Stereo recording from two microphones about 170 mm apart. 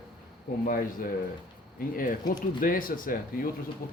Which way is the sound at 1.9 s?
55° left (ahead or behind).